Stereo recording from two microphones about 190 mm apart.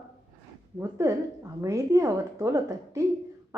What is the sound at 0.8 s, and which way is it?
A woman's voice, 15° right (ahead or behind).